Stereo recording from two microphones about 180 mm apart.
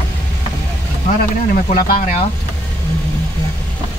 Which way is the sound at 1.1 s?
45° left (ahead or behind).